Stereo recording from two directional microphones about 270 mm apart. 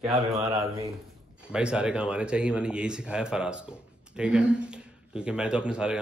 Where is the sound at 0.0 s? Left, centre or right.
Centre.